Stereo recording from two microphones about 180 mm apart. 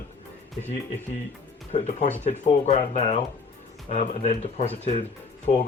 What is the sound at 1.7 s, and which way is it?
Speech, 35° left (ahead or behind).